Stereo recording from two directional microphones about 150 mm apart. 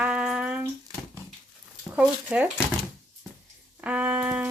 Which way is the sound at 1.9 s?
10° right (ahead or behind).